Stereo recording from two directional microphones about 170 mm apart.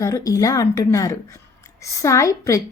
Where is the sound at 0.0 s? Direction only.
20° left (ahead or behind).